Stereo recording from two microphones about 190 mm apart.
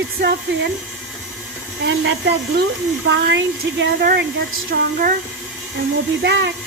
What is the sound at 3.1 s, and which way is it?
Speech, 70° right (ahead or behind).